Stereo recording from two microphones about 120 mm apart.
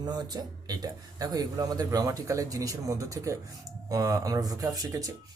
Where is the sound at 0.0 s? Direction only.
35° right (ahead or behind).